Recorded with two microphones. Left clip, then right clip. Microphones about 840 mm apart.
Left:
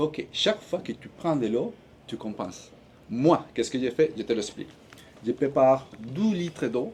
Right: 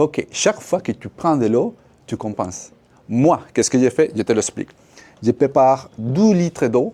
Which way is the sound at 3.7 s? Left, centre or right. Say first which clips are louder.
Right 8 dB; right.